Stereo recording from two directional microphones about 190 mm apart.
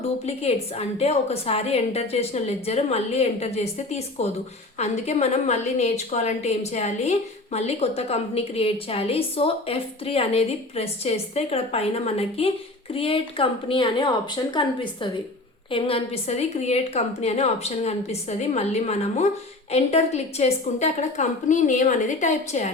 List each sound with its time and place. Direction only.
0.3 s a woman's voice: 35° left (ahead or behind)